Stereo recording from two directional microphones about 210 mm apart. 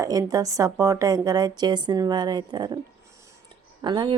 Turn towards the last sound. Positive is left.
turn(degrees=-20)  # may be behind; listen again after turning